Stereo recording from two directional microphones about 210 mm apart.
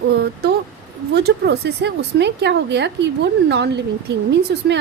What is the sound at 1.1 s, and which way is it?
A woman's voice, 50° right (ahead or behind).